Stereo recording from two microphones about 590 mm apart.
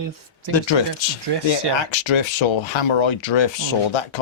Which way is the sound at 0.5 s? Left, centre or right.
Left.